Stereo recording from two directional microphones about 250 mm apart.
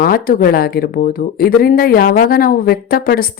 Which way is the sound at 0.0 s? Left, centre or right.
Left.